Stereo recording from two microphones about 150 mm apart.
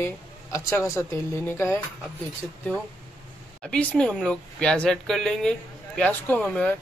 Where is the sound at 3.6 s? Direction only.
5° left (ahead or behind).